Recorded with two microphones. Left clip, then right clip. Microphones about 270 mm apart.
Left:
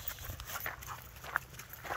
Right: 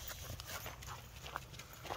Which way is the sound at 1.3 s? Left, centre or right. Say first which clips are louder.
Left 11 dB; centre.